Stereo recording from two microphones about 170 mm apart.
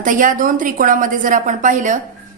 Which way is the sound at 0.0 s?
50° right (ahead or behind).